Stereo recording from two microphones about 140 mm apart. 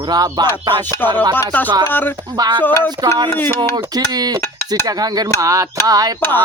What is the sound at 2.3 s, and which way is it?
Speech, 30° right (ahead or behind).